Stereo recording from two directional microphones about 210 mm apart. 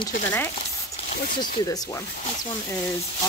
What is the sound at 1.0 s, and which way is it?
Speech, 45° left (ahead or behind).